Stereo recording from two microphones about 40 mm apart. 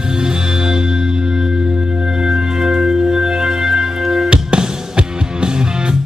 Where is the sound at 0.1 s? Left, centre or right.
Centre.